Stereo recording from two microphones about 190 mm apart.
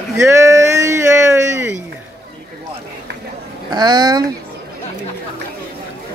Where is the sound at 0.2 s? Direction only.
15° right (ahead or behind).